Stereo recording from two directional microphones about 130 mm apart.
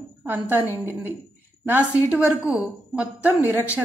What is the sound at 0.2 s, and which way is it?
A woman's voice, 15° right (ahead or behind).